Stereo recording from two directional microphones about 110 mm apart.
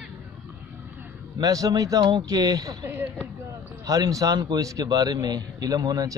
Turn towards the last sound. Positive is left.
turn(degrees=-35)  # may be behind; listen again after turning